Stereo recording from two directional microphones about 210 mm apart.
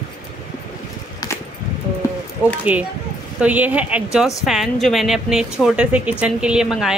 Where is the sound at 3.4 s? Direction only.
5° right (ahead or behind).